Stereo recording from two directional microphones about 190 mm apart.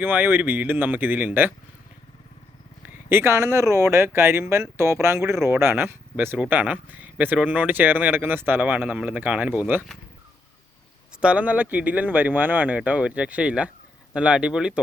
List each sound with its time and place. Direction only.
0.0 s speech: 10° right (ahead or behind)
3.1 s speech: 10° right (ahead or behind)
11.2 s speech: 5° right (ahead or behind)